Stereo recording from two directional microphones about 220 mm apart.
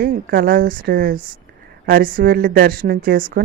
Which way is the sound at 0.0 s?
40° right (ahead or behind).